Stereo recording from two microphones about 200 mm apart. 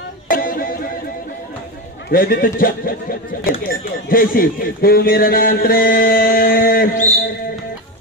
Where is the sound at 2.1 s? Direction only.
45° left (ahead or behind).